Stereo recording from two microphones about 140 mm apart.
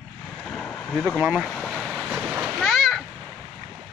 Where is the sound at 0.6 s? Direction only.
10° left (ahead or behind).